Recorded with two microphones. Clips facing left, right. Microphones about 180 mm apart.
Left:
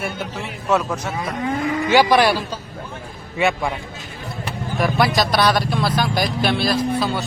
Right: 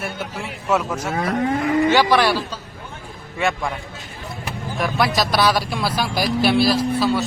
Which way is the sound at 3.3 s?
5° left (ahead or behind).